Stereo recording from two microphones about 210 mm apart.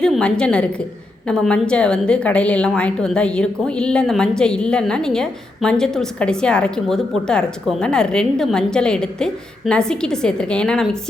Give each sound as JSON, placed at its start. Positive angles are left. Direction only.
{"t": 0.0, "sound": "a woman's voice", "side_deg": 5}